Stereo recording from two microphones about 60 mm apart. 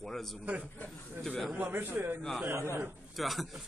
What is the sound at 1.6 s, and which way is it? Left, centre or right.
Speech, right.